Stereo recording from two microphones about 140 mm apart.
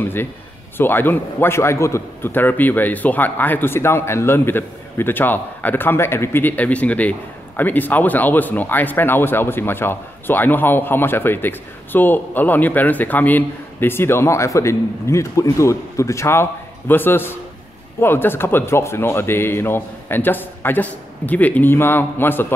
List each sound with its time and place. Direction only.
0.0 s a man's voice: 15° left (ahead or behind)